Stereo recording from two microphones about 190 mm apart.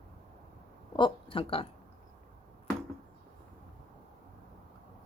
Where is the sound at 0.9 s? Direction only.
25° left (ahead or behind).